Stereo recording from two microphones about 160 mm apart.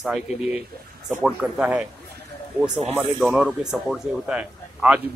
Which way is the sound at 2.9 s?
5° right (ahead or behind).